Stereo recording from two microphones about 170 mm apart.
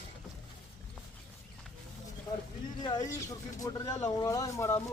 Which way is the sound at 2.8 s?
25° left (ahead or behind).